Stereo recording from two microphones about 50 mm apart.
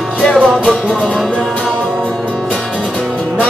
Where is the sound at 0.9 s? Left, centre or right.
Centre.